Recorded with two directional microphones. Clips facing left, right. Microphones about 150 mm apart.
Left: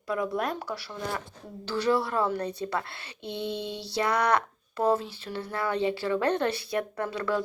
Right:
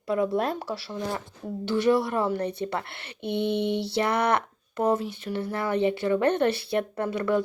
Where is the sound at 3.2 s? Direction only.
65° right (ahead or behind).